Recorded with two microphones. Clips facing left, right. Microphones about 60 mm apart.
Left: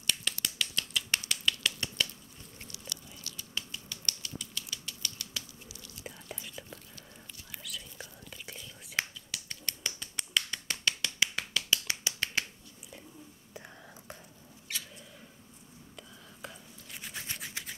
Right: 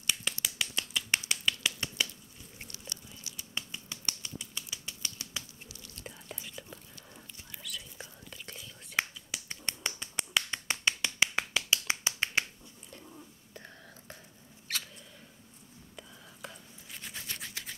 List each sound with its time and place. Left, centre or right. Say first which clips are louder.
0.0 s scissors: even; centre
1.3 s finger snapping: even; centre
2.9 s biting: left 2 dB; right
3.3 s finger snapping: even; right
5.9 s whispering: left 1 dB; centre
7.5 s whispering: even; left
8.3 s whispering: left 1 dB; centre
9.3 s finger snapping: right 2 dB; right
13.5 s whispering: left 3 dB; centre
16.0 s toothbrush: even; centre
17.6 s a sound: left 1 dB; centre